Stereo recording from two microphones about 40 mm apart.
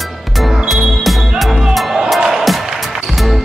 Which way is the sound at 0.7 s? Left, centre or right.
Centre.